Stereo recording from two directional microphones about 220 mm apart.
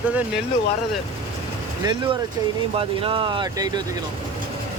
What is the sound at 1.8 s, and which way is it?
Speech, 20° right (ahead or behind).